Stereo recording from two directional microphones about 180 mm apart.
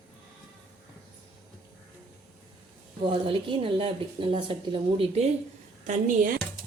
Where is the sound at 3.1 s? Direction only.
25° right (ahead or behind).